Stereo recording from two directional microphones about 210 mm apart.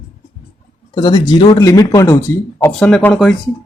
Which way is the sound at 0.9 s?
20° left (ahead or behind).